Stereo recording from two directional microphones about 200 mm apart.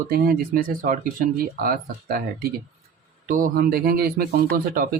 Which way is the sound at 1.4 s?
45° right (ahead or behind).